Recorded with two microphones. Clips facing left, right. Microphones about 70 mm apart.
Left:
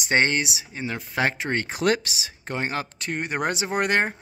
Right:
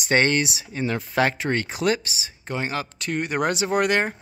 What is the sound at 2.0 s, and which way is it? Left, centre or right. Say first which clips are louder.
Speech: even; left.